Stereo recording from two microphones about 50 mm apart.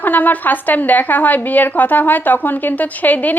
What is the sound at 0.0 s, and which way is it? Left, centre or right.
Speech, left.